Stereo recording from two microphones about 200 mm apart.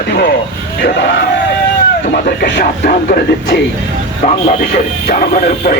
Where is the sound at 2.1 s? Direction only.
50° left (ahead or behind).